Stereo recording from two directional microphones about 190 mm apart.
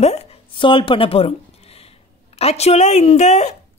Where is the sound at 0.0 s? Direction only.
35° left (ahead or behind).